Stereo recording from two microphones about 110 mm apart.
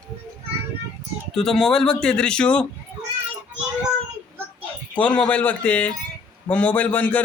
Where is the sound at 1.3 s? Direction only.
5° left (ahead or behind).